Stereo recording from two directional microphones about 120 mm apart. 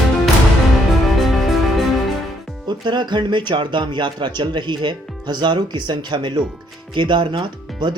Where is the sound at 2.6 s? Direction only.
40° right (ahead or behind).